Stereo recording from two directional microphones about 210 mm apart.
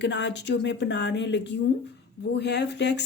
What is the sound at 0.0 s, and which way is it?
Speech, 55° left (ahead or behind).